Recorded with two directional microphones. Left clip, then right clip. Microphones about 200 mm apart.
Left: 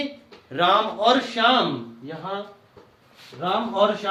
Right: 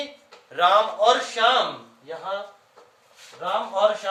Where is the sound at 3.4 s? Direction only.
5° right (ahead or behind).